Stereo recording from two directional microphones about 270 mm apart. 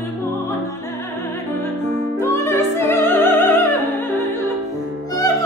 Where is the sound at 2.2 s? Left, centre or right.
Centre.